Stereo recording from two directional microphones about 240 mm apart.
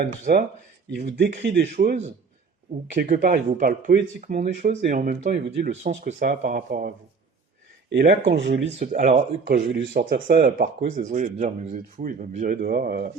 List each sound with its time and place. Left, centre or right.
0.3 s speech: right
8.6 s speech: right
9.7 s speech: right